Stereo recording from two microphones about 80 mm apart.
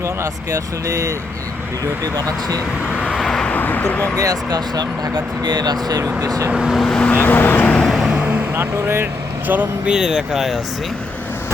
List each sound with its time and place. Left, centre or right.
0.0 s speech: right
2.9 s vehicle: centre
3.2 s vehicle: centre
3.5 s speech: left
4.2 s speech: right
6.5 s speech: centre
6.7 s speech: centre
7.1 s speech: left
7.9 s a sound: centre
8.5 s speech: right
9.5 s speech: right
9.9 s speech: centre